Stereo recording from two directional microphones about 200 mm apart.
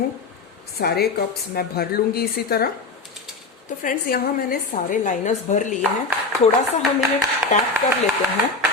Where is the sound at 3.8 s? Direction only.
45° left (ahead or behind).